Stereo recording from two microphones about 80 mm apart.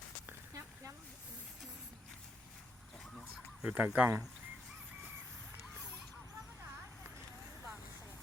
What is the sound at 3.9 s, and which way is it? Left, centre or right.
Speech, right.